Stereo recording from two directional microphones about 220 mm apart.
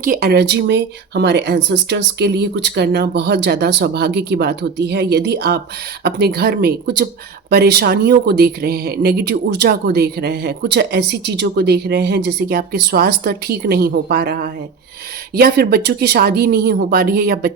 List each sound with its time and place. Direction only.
0.0 s speech: 40° right (ahead or behind)